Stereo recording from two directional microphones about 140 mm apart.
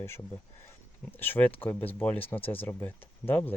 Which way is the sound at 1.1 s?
15° left (ahead or behind).